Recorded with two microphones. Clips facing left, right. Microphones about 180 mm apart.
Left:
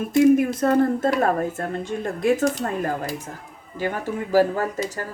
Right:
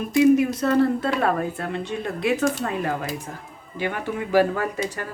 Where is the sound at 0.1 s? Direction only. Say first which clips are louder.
Left 1 dB; 50° left (ahead or behind).